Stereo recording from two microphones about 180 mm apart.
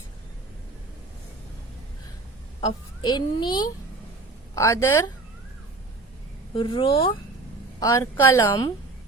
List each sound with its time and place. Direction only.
2.6 s a child's voice: 25° left (ahead or behind)
6.5 s a child's voice: 30° left (ahead or behind)
7.8 s a woman's voice: 20° left (ahead or behind)